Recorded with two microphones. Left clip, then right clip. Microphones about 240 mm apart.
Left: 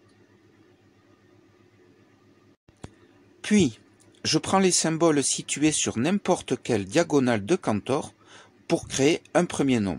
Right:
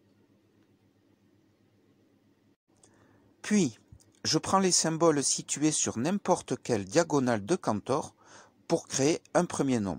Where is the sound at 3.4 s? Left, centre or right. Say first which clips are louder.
Left 6 dB; centre.